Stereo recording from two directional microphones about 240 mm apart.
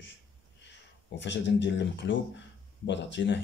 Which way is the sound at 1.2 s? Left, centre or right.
Left.